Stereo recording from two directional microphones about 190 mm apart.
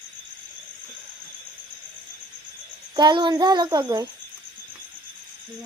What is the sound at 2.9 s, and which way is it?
Speech, 25° right (ahead or behind).